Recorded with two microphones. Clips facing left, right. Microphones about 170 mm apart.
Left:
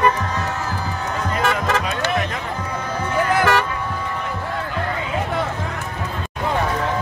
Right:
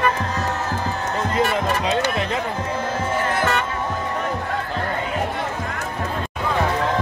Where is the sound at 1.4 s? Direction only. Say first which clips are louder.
Left 1 dB; 90° left.